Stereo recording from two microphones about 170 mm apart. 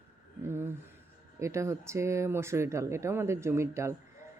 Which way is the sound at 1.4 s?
15° right (ahead or behind).